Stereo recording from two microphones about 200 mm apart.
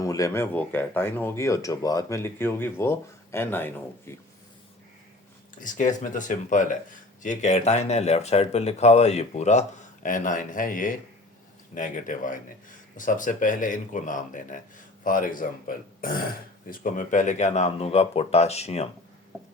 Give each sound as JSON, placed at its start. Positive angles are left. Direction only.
{"t": 0.0, "sound": "speech", "side_deg": 15}
{"t": 5.5, "sound": "speech", "side_deg": 40}